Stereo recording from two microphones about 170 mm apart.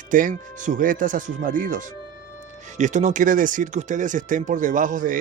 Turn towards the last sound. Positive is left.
turn(degrees=-50)  # may be behind; listen again after turning